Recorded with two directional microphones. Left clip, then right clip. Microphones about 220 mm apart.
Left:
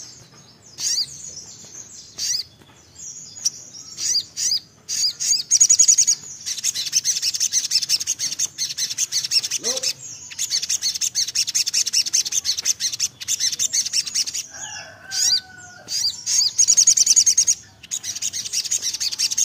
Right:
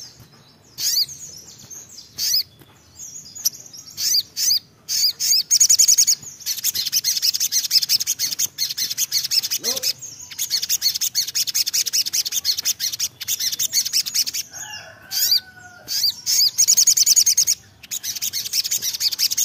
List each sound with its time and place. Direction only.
0.7 s chirp: 30° right (ahead or behind)
2.1 s bird: 30° right (ahead or behind)
3.4 s bird: 30° right (ahead or behind)